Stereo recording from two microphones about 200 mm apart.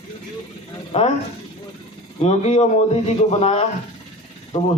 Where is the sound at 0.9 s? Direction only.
35° left (ahead or behind).